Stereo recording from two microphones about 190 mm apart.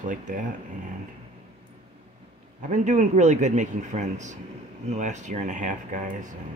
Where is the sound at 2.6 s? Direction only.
40° right (ahead or behind).